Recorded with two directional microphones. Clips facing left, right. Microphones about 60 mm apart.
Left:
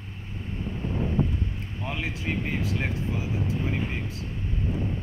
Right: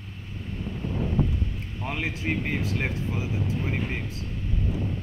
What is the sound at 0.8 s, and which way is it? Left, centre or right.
Wind noise, left.